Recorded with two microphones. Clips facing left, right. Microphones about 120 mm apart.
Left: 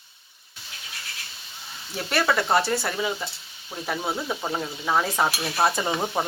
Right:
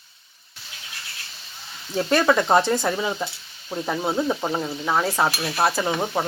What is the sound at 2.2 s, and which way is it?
Speech, 15° right (ahead or behind).